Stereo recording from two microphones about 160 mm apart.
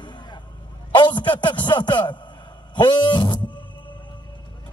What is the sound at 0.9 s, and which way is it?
A man's voice, 30° left (ahead or behind).